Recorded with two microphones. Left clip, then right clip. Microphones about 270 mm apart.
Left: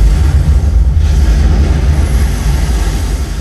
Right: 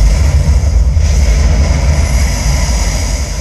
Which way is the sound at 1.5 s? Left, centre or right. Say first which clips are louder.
Right 1 dB; centre.